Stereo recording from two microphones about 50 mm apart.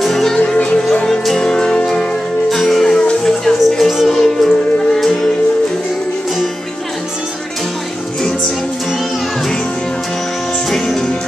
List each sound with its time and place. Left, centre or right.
0.0 s music: centre
1.0 s music: centre
2.5 s music: centre
10.7 s music: centre